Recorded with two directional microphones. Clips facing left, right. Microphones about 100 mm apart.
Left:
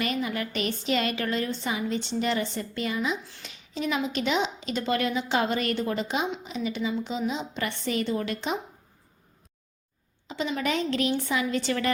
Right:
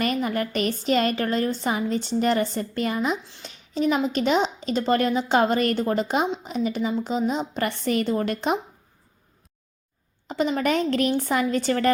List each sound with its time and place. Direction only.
0.0 s a woman's voice: 45° right (ahead or behind)
3.2 s speech: 20° right (ahead or behind)
3.5 s a woman's voice: 40° right (ahead or behind)
10.2 s a woman's voice: 45° right (ahead or behind)